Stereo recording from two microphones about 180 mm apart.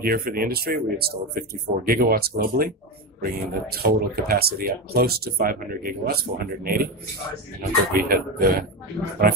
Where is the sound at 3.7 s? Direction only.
60° right (ahead or behind).